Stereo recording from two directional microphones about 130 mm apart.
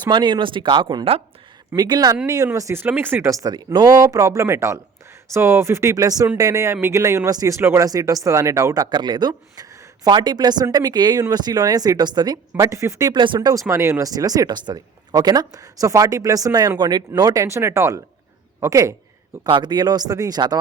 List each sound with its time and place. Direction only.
0.1 s speech: 35° right (ahead or behind)
1.7 s speech: 30° right (ahead or behind)
13.1 s speech: 40° right (ahead or behind)
19.5 s speech: 35° right (ahead or behind)